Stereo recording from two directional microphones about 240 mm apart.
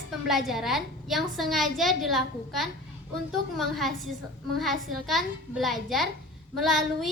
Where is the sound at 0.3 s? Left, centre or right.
Centre.